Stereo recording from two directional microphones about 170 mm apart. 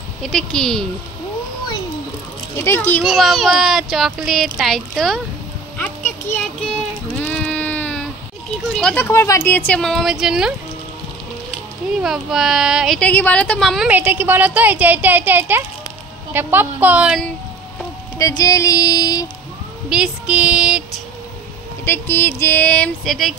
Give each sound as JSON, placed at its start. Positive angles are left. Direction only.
{"t": 0.2, "sound": "speech", "side_deg": 5}
{"t": 2.5, "sound": "a sound", "side_deg": 15}
{"t": 3.0, "sound": "speech", "side_deg": 0}
{"t": 5.8, "sound": "a sound", "side_deg": 10}
{"t": 7.1, "sound": "sheep", "side_deg": 10}
{"t": 8.7, "sound": "speech", "side_deg": 10}
{"t": 12.0, "sound": "a woman's voice", "side_deg": 0}
{"t": 18.1, "sound": "female singing", "side_deg": 20}
{"t": 19.9, "sound": "speech", "side_deg": -5}
{"t": 21.8, "sound": "a sound", "side_deg": 15}